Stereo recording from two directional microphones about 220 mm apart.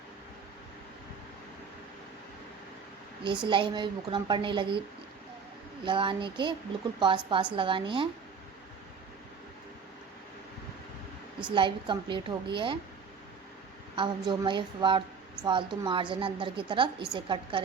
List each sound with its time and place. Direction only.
3.2 s a woman's voice: 20° right (ahead or behind)
5.8 s a woman's voice: 20° right (ahead or behind)
11.5 s a woman's voice: 20° right (ahead or behind)
13.9 s a woman's voice: 20° right (ahead or behind)